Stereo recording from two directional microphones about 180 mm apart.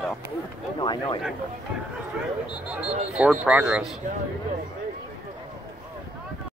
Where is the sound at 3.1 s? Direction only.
5° right (ahead or behind).